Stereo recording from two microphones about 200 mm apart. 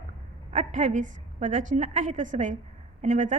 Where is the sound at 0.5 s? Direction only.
35° right (ahead or behind).